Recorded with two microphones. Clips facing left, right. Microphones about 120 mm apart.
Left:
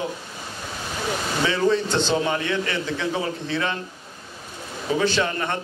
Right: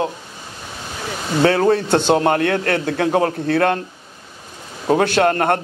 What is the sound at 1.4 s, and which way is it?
A man's voice, 60° right (ahead or behind).